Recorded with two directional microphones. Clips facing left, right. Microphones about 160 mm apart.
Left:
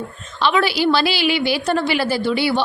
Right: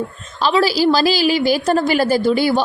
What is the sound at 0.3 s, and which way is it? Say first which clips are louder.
A woman's voice: right 2 dB; 35° right (ahead or behind).